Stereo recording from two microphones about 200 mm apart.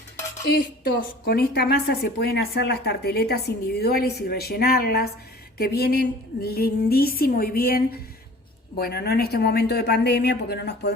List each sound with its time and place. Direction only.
0.4 s a woman's voice: 50° left (ahead or behind)